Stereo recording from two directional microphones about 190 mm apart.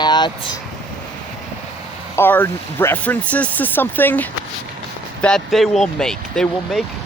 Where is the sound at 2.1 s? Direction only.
10° left (ahead or behind).